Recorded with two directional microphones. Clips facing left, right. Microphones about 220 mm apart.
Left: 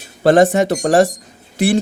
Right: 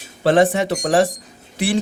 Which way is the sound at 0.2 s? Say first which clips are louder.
Left 4 dB; 45° left (ahead or behind).